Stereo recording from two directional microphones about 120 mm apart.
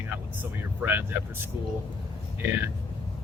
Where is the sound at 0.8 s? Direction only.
15° right (ahead or behind).